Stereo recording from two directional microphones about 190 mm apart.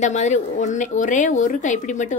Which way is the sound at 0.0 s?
40° left (ahead or behind).